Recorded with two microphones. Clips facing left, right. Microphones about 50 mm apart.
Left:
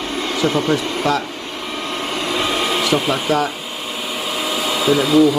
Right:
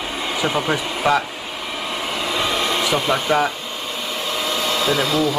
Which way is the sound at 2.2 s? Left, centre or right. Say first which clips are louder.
Left 1 dB; centre.